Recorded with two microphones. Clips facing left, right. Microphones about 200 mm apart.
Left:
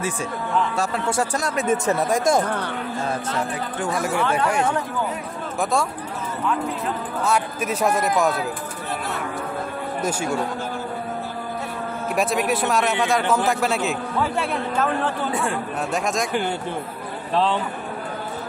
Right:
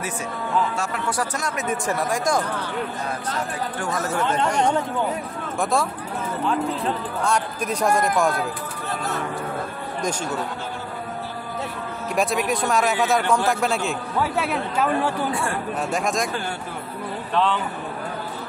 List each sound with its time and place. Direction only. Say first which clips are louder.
0.7 s speech: left 3 dB; 30° left (ahead or behind)
3.8 s a man's voice: left 2 dB; 10° left (ahead or behind)
7.2 s a man's voice: left 1 dB; 5° left (ahead or behind)
10.0 s speech: left 2 dB; 10° left (ahead or behind)
12.2 s a man's voice: even; centre (ahead or behind)
17.3 s speech: left 1 dB; 35° left (ahead or behind)